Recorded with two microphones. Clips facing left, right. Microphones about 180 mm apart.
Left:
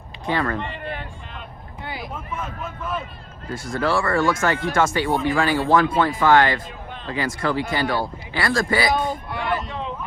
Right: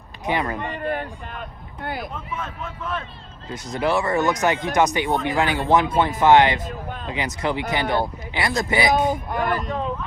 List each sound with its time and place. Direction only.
0.3 s speech: 15° right (ahead or behind)
0.6 s a sound: 45° right (ahead or behind)
1.8 s speech: 50° right (ahead or behind)
2.4 s speech: 5° left (ahead or behind)
3.5 s speech: 20° right (ahead or behind)
9.3 s speech: 45° right (ahead or behind)